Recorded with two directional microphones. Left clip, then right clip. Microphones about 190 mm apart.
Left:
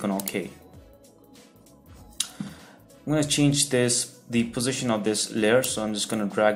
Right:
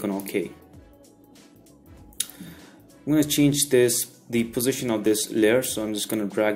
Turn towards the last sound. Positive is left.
turn(degrees=-30)  # may be behind; listen again after turning